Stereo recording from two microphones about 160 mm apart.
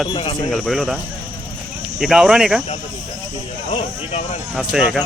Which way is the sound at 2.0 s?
5° right (ahead or behind).